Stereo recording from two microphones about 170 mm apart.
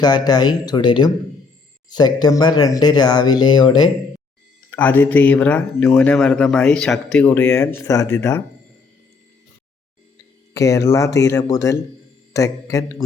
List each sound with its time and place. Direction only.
0.0 s speech: 25° left (ahead or behind)
4.7 s speech: 10° left (ahead or behind)
10.5 s speech: 20° left (ahead or behind)